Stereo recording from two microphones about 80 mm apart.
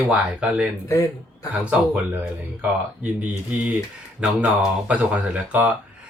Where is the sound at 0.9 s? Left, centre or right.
Left.